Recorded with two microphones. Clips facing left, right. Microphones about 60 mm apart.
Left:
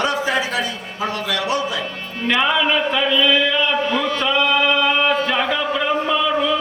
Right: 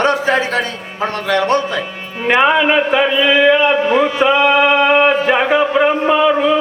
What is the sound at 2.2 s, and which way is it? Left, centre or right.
A man's voice, right.